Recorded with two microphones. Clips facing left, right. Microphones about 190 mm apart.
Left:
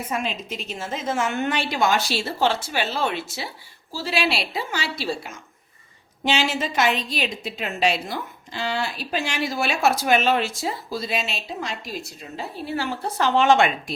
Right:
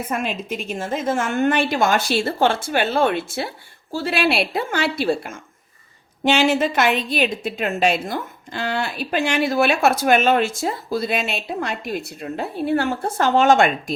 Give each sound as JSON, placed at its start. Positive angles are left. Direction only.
{"t": 0.1, "sound": "a woman's voice", "side_deg": -55}